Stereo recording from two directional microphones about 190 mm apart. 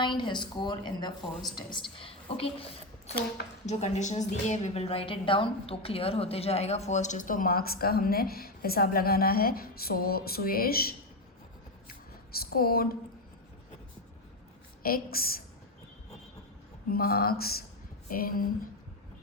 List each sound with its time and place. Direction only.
0.0 s a woman's voice: 25° left (ahead or behind)
3.7 s a woman's voice: 35° left (ahead or behind); by 10.8 s 50° left (ahead or behind)
12.4 s a woman's voice: 50° left (ahead or behind)
14.8 s a woman's voice: 50° left (ahead or behind)
16.9 s a woman's voice: 50° left (ahead or behind)